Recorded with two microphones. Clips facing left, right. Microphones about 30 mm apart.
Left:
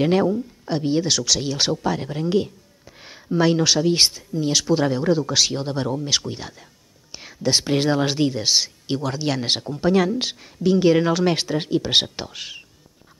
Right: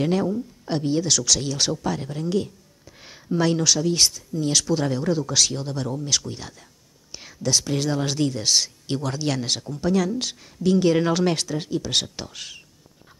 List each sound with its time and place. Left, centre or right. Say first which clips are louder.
0.0 s speech: left 4 dB; left
3.0 s speech: left 3 dB; centre
7.1 s whispering: left 2 dB; centre
7.4 s speech: left 4 dB; left; by 9.4 s centre
9.4 s speech: left 4 dB; left; by 11.3 s centre
11.3 s speech: left 4 dB; left
12.3 s speech: left 3 dB; centre